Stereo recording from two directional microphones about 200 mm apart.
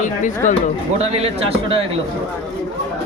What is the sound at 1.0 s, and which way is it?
Speech, 30° right (ahead or behind).